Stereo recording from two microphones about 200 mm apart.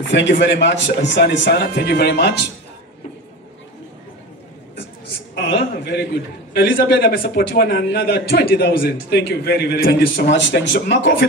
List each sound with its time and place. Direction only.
0.1 s speech: 65° left (ahead or behind)
5.3 s a man's voice: 55° left (ahead or behind)